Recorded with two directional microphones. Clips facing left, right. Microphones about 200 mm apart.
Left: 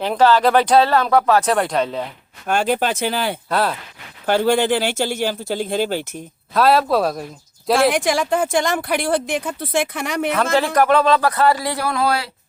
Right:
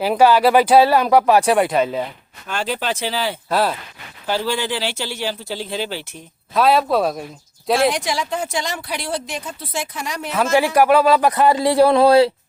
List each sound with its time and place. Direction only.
0.0 s speech: 10° right (ahead or behind)
2.5 s speech: 50° left (ahead or behind)
3.5 s speech: centre (ahead or behind)
4.3 s speech: 55° left (ahead or behind)
6.5 s speech: centre (ahead or behind)
7.8 s speech: 55° left (ahead or behind)
10.3 s speech: 10° right (ahead or behind); by 12.3 s 30° right (ahead or behind)